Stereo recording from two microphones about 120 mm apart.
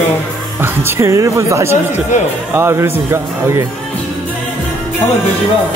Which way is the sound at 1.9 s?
75° left (ahead or behind).